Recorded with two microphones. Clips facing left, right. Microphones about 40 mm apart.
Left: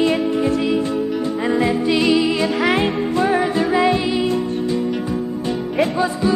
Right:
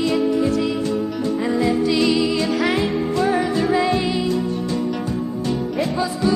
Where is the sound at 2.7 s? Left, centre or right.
Left.